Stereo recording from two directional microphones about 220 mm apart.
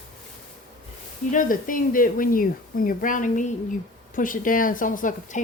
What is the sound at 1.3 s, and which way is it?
A woman's voice, 35° left (ahead or behind).